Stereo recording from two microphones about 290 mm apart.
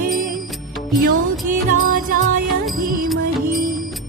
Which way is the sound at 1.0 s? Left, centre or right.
Right.